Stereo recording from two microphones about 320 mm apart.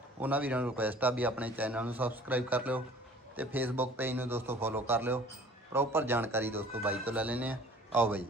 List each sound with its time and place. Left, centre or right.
0.2 s a man's voice: centre